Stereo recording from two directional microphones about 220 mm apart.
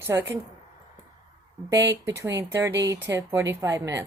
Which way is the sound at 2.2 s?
15° right (ahead or behind).